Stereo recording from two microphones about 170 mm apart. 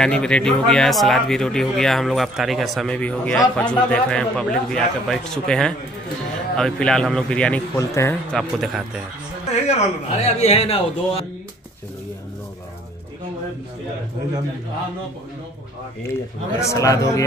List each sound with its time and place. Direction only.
0.0 s speech: 5° left (ahead or behind)
8.3 s speech: centre (ahead or behind)
9.7 s a man's voice: 40° left (ahead or behind)
16.5 s a man's voice: 20° left (ahead or behind)